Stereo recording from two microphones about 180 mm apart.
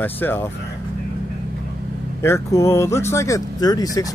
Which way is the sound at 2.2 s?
15° left (ahead or behind).